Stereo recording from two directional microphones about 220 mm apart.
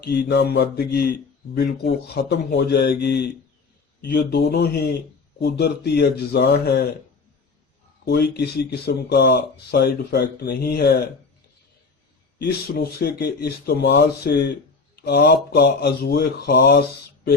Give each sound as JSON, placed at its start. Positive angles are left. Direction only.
{"t": 0.0, "sound": "speech", "side_deg": 50}
{"t": 8.0, "sound": "speech", "side_deg": 50}
{"t": 13.0, "sound": "speech", "side_deg": 45}